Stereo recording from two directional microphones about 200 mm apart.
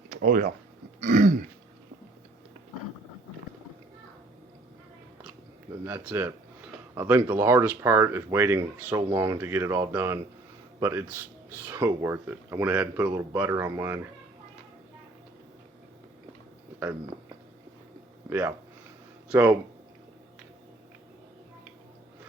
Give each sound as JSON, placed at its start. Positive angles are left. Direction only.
{"t": 0.1, "sound": "speech", "side_deg": -45}
{"t": 1.0, "sound": "throat clearing", "side_deg": -35}
{"t": 5.8, "sound": "speech", "side_deg": -10}
{"t": 18.3, "sound": "speech", "side_deg": -10}